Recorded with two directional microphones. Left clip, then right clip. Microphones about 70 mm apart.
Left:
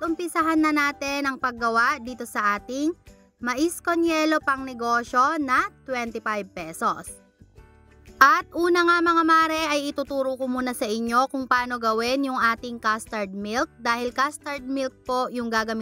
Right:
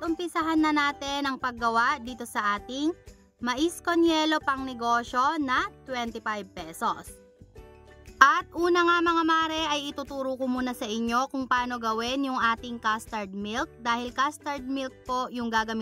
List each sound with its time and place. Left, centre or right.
0.2 s a woman's voice: left
8.2 s a child's voice: left